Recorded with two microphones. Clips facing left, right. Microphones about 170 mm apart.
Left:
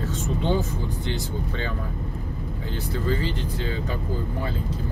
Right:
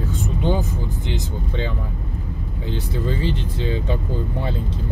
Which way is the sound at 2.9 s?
15° right (ahead or behind).